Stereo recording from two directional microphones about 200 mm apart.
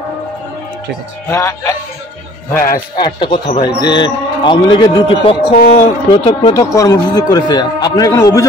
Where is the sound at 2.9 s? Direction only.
20° left (ahead or behind).